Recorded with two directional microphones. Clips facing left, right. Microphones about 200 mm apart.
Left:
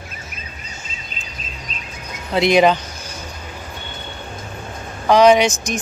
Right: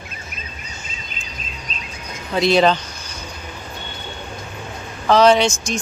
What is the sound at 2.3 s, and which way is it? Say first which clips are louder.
Speech: left 1 dB; 15° left (ahead or behind).